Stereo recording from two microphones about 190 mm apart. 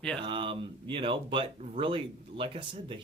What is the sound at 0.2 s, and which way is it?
Speech, 25° right (ahead or behind).